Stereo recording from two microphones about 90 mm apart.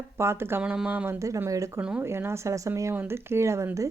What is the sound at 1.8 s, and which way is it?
Speech, 10° right (ahead or behind).